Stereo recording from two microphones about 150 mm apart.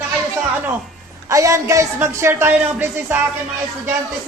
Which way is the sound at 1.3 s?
20° right (ahead or behind).